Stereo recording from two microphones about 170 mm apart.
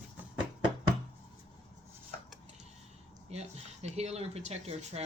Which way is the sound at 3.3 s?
40° right (ahead or behind).